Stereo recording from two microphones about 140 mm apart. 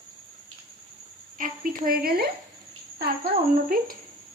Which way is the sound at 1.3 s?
80° right.